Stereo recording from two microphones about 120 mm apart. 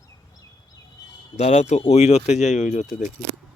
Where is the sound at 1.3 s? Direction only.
60° left (ahead or behind).